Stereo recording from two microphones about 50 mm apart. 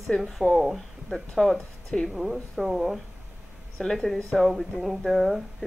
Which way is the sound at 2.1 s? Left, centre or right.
Centre.